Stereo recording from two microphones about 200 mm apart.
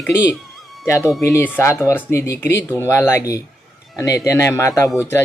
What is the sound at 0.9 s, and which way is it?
Speech, 15° left (ahead or behind).